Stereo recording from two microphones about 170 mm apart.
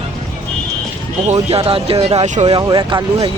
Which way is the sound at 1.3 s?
35° right (ahead or behind).